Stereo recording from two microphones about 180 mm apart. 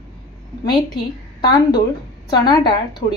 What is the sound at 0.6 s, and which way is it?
Speech, 25° left (ahead or behind).